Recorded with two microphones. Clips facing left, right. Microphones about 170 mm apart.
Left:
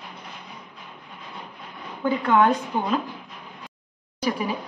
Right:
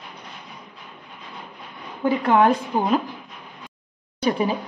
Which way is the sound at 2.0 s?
30° right (ahead or behind).